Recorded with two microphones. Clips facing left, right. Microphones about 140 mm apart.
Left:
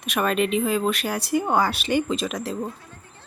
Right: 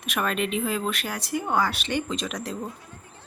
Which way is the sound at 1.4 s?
30° left (ahead or behind).